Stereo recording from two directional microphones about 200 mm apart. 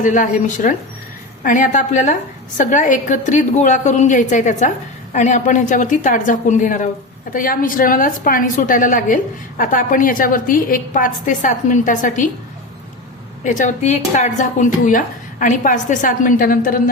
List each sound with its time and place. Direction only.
0.0 s a woman's voice: 40° left (ahead or behind)
13.4 s speech: 40° left (ahead or behind)